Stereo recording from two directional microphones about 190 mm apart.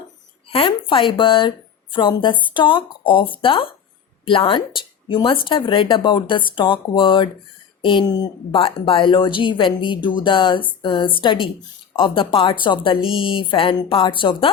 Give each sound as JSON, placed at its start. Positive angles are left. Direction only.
{"t": 0.5, "sound": "speech", "side_deg": 25}